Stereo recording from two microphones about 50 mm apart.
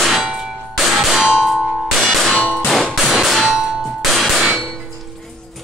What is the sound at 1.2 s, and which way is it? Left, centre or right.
Clang, centre.